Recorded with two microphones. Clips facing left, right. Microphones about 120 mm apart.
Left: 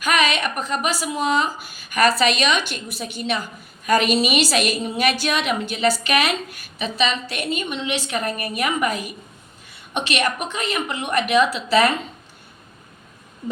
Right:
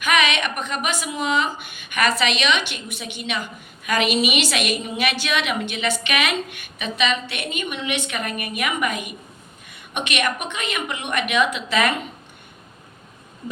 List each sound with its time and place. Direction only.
0.0 s a woman's voice: 40° left (ahead or behind)